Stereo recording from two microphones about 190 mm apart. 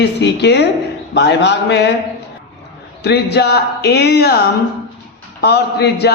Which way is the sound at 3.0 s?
60° left (ahead or behind).